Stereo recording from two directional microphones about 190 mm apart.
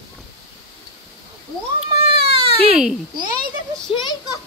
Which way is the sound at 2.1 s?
30° right (ahead or behind).